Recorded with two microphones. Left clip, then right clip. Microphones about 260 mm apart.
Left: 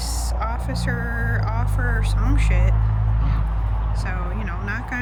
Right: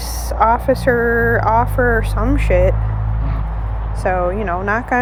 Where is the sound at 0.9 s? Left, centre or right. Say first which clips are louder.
Right 12 dB; right.